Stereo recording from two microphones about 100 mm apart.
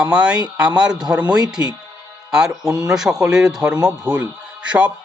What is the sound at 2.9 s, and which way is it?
Speech, 5° right (ahead or behind).